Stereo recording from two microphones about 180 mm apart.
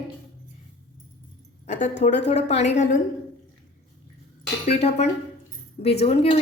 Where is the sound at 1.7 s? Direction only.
40° left (ahead or behind).